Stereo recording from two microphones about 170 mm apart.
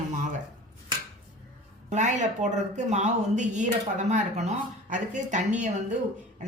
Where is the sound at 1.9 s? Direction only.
45° right (ahead or behind).